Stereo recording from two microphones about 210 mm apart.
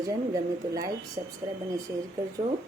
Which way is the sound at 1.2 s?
25° right (ahead or behind).